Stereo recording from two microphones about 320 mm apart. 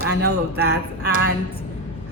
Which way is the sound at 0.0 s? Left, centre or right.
Right.